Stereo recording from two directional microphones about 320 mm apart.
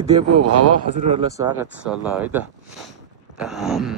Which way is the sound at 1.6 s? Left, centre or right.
Centre.